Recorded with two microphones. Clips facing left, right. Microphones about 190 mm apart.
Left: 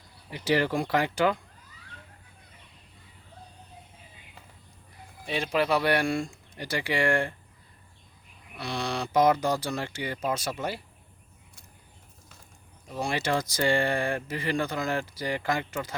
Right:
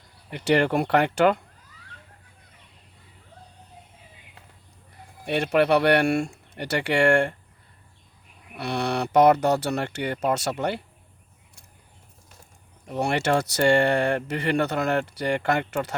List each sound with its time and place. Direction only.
0.3 s speech: 65° right (ahead or behind)
5.2 s speech: 65° right (ahead or behind)
8.5 s speech: 60° right (ahead or behind)
12.9 s speech: 65° right (ahead or behind)